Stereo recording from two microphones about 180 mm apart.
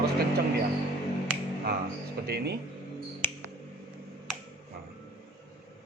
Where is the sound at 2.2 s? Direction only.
60° right (ahead or behind).